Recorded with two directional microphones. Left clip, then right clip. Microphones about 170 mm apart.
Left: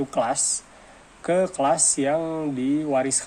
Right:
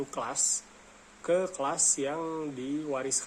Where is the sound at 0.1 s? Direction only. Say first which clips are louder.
Left 9 dB; 30° left (ahead or behind).